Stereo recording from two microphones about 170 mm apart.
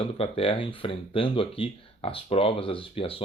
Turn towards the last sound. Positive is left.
turn(degrees=35)  # may be behind; listen again after turning